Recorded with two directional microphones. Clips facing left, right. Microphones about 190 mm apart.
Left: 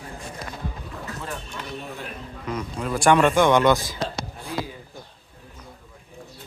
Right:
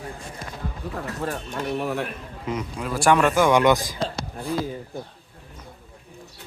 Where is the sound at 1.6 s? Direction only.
70° right (ahead or behind).